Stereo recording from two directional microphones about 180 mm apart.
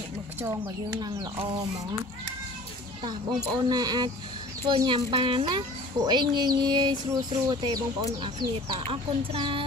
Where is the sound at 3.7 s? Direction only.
20° right (ahead or behind).